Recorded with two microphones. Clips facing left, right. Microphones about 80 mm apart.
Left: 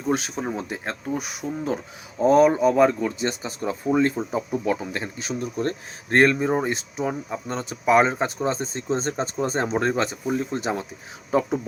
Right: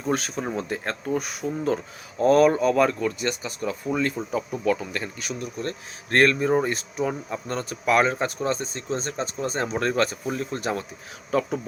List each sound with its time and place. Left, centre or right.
0.0 s speech: centre; by 5.7 s left
6.1 s speech: left